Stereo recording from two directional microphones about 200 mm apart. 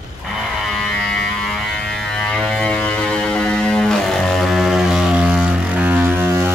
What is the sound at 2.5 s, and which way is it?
Music, 5° left (ahead or behind).